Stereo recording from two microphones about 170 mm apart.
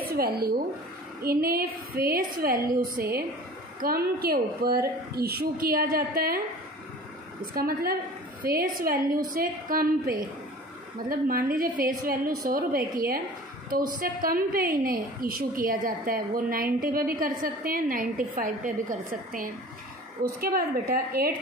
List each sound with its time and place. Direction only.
0.1 s a woman's voice: 65° right (ahead or behind)
7.5 s a woman's voice: 60° right (ahead or behind)